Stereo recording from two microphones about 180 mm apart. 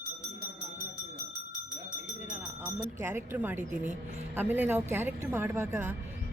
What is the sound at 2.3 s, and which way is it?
A woman's voice, 15° right (ahead or behind).